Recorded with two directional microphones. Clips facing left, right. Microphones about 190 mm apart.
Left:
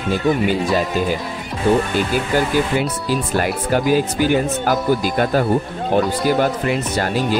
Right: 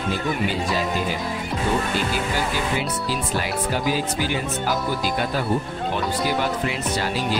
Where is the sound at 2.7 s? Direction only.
50° left (ahead or behind).